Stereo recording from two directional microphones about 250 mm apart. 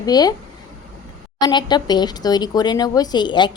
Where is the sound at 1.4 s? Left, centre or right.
Centre.